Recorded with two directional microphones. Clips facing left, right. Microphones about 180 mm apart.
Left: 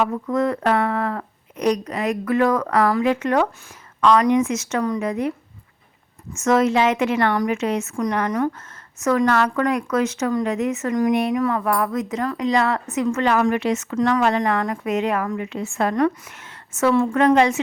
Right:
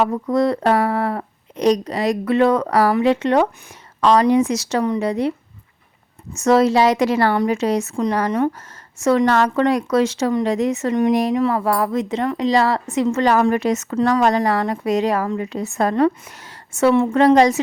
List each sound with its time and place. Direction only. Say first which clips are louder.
0.0 s speech: right 3 dB; 35° right (ahead or behind)
6.3 s speech: right 3 dB; 35° right (ahead or behind)